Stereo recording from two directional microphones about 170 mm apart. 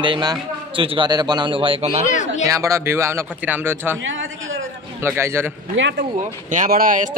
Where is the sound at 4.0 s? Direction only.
90° right.